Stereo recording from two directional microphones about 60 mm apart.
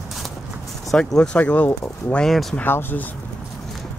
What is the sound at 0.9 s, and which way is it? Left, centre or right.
Speech, centre.